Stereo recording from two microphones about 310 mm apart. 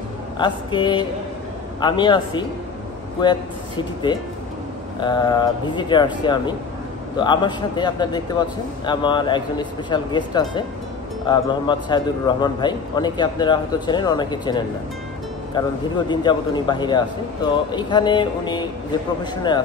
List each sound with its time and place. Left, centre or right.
0.4 s a man's voice: centre